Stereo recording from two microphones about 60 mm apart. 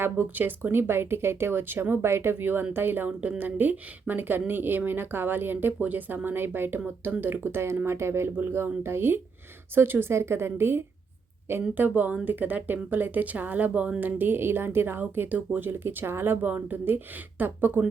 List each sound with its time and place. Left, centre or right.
0.0 s speech: right
3.1 s a woman's voice: right
8.4 s a woman's voice: right
11.7 s speech: right